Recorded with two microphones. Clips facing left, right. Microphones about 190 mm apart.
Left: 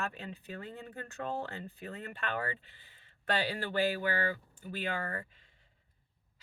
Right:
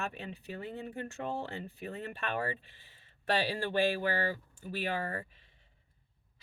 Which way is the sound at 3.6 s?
15° right (ahead or behind).